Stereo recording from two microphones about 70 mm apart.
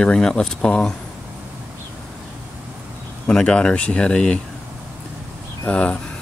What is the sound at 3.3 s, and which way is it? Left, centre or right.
Speech, centre.